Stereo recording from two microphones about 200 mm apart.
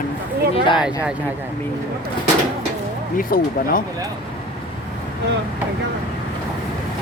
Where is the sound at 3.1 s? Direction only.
45° left (ahead or behind).